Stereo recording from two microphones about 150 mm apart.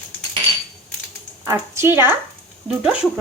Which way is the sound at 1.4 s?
20° right (ahead or behind).